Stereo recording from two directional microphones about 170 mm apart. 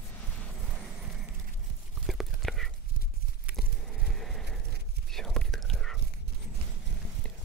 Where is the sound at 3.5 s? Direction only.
Centre (ahead or behind).